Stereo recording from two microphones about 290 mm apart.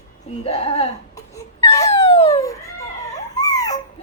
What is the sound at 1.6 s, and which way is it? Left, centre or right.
Wail, centre.